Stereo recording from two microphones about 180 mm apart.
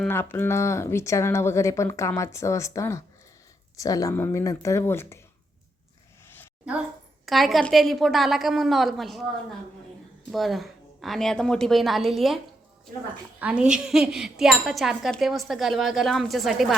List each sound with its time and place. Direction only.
0.0 s speech: 10° left (ahead or behind)
6.2 s a sound: 10° left (ahead or behind)
7.3 s speech: centre (ahead or behind)
13.4 s speech: 5° right (ahead or behind)